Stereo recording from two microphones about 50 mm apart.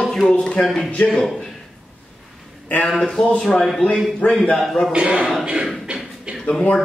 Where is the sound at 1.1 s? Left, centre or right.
Centre.